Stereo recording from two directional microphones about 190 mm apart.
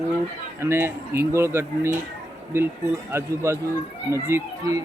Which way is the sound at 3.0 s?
15° right (ahead or behind).